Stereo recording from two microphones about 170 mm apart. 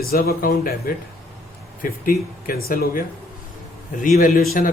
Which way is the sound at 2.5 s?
55° left (ahead or behind).